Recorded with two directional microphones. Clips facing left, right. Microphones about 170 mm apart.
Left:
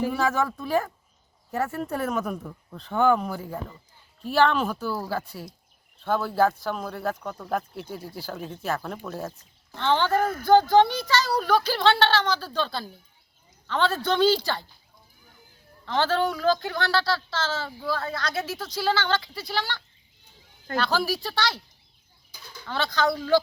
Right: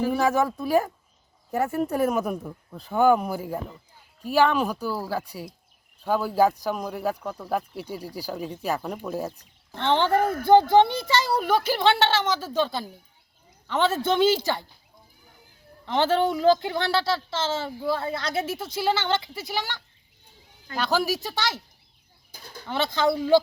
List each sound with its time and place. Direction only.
0.1 s speech: 15° right (ahead or behind)
9.8 s a woman's voice: 20° right (ahead or behind)
15.9 s a woman's voice: 25° right (ahead or behind)
22.3 s bird: 50° right (ahead or behind)
22.6 s a woman's voice: 25° right (ahead or behind)